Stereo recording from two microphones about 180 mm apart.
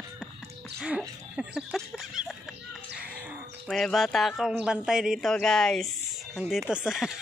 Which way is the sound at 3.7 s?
Centre (ahead or behind).